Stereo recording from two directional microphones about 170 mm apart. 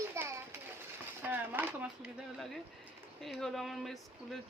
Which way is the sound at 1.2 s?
10° right (ahead or behind).